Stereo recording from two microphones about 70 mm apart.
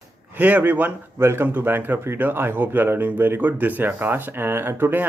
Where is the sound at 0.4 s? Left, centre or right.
Right.